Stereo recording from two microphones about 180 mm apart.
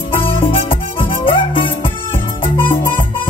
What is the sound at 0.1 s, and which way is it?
Music, 30° left (ahead or behind).